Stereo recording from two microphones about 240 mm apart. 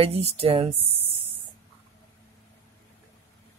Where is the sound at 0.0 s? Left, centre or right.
Right.